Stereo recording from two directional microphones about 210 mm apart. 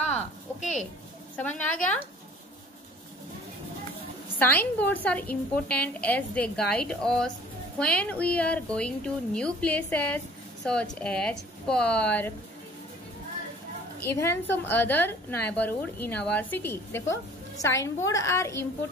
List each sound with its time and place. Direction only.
0.6 s speech: 35° left (ahead or behind)
1.3 s a woman's voice: 5° left (ahead or behind)
4.4 s a woman's voice: 10° left (ahead or behind)
13.9 s a woman's voice: 10° left (ahead or behind)